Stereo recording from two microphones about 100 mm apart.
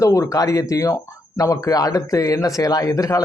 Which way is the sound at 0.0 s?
30° left (ahead or behind).